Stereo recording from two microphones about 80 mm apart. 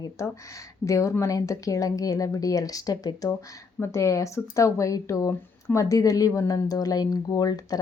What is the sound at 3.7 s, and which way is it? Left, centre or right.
A woman's voice, left.